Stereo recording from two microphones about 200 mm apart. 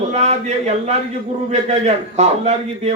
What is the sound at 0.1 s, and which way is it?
A man's voice, 35° right (ahead or behind).